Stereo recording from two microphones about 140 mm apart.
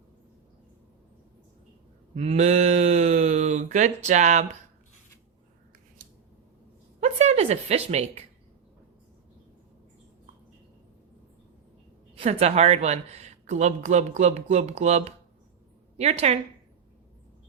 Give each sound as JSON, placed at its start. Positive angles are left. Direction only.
{"t": 2.1, "sound": "speech", "side_deg": -50}
{"t": 7.0, "sound": "a sound", "side_deg": -50}
{"t": 12.1, "sound": "a woman's voice", "side_deg": -45}